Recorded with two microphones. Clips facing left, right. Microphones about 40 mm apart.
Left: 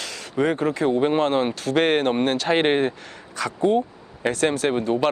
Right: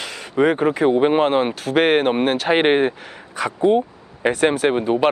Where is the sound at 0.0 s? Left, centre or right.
Centre.